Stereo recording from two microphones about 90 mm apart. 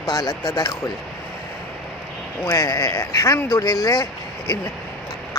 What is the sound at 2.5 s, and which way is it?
Speech, 35° left (ahead or behind).